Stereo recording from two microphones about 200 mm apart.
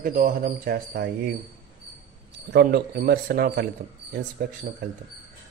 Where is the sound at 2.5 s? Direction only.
50° right (ahead or behind).